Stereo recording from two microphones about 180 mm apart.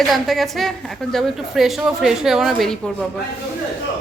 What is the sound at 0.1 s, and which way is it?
A woman's voice, centre (ahead or behind).